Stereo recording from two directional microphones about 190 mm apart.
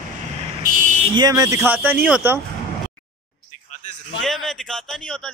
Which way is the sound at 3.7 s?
40° left (ahead or behind).